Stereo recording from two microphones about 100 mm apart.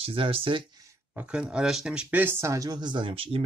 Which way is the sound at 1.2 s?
10° right (ahead or behind).